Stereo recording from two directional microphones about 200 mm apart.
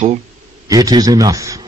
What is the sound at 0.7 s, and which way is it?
Speech, 20° right (ahead or behind).